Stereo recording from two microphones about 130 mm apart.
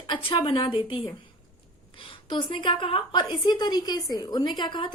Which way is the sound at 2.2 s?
35° left (ahead or behind).